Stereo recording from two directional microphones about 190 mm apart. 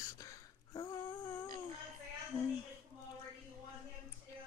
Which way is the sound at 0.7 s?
20° left (ahead or behind).